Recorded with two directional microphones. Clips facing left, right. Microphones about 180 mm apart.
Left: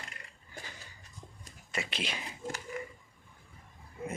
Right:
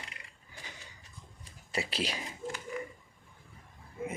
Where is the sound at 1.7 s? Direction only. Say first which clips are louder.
Right 3 dB; 35° right (ahead or behind).